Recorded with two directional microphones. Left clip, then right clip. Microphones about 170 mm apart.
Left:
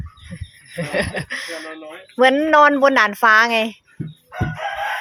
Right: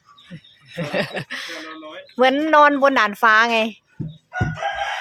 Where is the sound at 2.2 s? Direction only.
Centre (ahead or behind).